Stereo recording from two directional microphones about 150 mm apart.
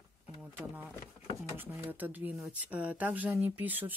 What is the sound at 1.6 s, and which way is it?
Speech, 10° right (ahead or behind).